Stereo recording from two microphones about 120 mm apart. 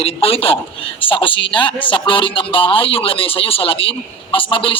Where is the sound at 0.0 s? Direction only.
55° left (ahead or behind).